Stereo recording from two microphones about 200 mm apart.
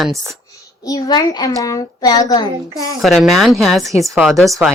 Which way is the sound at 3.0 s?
Centre (ahead or behind).